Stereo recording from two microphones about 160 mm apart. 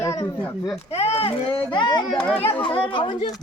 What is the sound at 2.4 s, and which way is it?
Speech, 35° left (ahead or behind).